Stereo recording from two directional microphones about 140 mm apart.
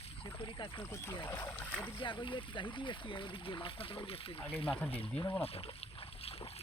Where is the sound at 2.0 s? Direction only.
35° left (ahead or behind).